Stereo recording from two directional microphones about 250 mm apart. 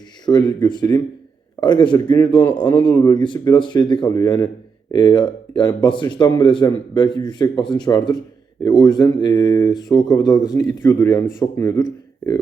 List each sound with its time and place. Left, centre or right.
0.3 s a man's voice: centre